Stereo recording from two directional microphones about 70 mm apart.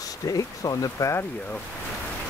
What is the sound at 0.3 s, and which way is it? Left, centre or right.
Speech, left.